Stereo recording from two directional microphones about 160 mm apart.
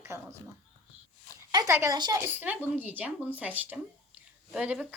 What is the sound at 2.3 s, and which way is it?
Speech, 10° right (ahead or behind).